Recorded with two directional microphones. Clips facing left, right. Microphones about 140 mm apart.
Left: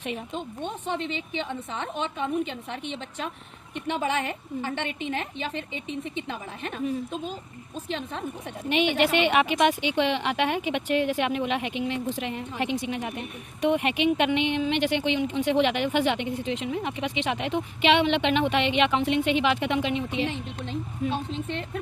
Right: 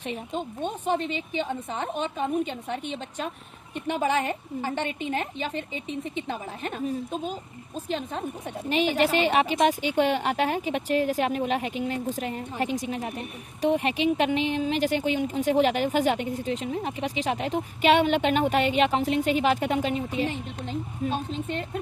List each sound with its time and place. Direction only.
0.3 s a woman's voice: 45° right (ahead or behind)